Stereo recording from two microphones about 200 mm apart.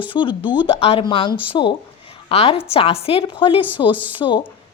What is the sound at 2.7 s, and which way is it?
A woman's voice, 30° left (ahead or behind).